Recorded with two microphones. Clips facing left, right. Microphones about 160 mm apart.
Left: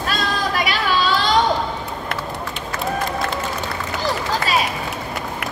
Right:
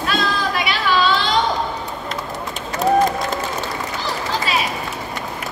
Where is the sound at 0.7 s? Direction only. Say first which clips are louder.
Right 4 dB; 40° left (ahead or behind).